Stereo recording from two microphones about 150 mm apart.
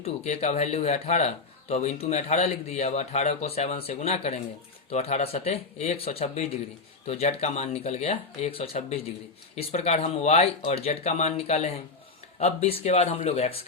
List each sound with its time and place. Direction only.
0.0 s speech: 45° left (ahead or behind)